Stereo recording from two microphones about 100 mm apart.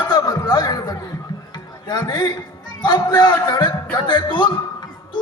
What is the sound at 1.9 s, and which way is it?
A man's voice, 45° left (ahead or behind).